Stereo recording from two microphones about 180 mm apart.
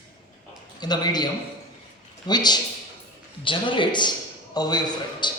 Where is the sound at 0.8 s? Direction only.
25° left (ahead or behind).